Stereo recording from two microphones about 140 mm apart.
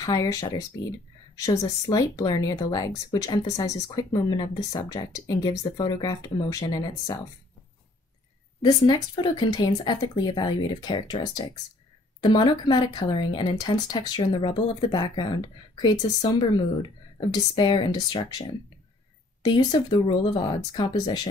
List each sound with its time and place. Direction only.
0.0 s speech: 25° left (ahead or behind)
8.6 s speech: 30° left (ahead or behind)
12.6 s speech: 35° left (ahead or behind)